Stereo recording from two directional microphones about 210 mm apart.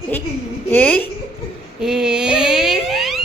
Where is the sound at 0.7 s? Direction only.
10° left (ahead or behind).